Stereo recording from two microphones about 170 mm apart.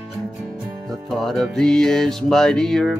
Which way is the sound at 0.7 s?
20° right (ahead or behind).